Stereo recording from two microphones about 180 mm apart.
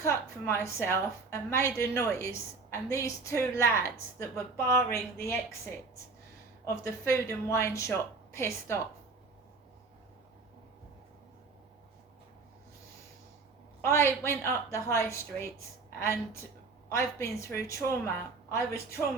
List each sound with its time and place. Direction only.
0.0 s a woman's voice: 15° left (ahead or behind)
6.8 s a woman's voice: 15° left (ahead or behind)
13.8 s a woman's voice: 15° left (ahead or behind)